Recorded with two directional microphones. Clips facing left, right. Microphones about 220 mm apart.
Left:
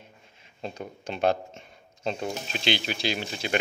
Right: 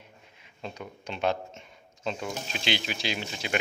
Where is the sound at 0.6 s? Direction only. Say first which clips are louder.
Left 3 dB; 35° left (ahead or behind).